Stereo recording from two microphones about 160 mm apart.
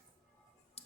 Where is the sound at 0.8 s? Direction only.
40° left (ahead or behind).